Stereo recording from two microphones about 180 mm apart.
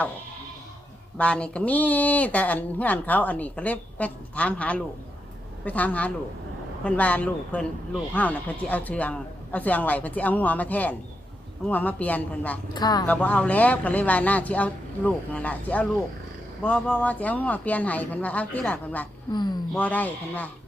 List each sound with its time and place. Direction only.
1.2 s speech: 5° left (ahead or behind)
12.7 s speech: 20° left (ahead or behind)
13.1 s speech: 10° left (ahead or behind)
19.3 s speech: 25° left (ahead or behind)
19.7 s speech: 10° left (ahead or behind)